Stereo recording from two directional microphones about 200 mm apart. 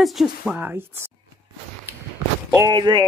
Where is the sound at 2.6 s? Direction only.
20° right (ahead or behind).